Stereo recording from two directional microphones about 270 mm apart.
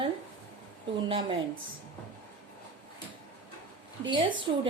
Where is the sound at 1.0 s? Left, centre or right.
Centre.